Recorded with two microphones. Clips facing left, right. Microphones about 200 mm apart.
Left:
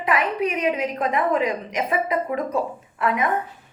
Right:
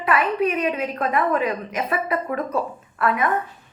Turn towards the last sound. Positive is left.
turn(degrees=15)  # may be behind; listen again after turning